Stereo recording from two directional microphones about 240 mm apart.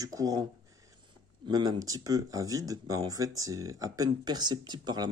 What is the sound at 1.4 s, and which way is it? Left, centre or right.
Speech, centre.